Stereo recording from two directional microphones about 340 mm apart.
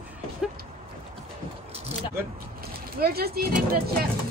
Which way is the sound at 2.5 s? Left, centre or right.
Right.